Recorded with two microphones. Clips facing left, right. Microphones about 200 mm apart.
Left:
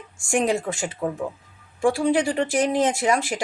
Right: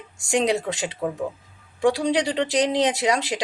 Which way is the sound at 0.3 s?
20° right (ahead or behind).